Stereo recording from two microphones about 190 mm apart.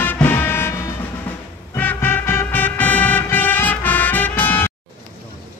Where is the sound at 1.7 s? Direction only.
10° left (ahead or behind).